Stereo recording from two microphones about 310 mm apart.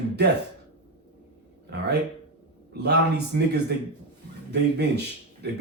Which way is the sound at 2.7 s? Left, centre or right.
Right.